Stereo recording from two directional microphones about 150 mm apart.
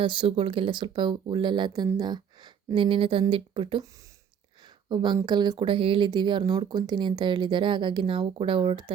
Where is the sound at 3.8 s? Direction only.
20° right (ahead or behind).